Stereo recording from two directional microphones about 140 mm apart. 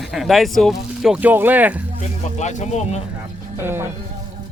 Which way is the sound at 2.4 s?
55° left (ahead or behind).